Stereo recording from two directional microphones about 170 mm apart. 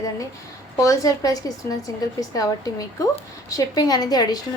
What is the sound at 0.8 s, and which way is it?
A woman's voice, 20° left (ahead or behind).